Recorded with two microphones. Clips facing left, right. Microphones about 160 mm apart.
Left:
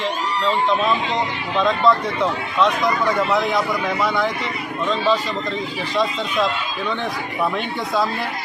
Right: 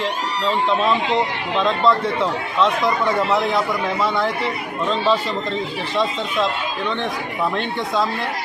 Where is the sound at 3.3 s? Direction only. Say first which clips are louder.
Even; centre (ahead or behind).